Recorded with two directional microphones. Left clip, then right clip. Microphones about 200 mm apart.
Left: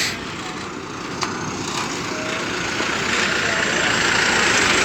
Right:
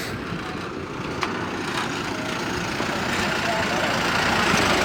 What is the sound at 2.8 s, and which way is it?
Vehicle, 55° right (ahead or behind).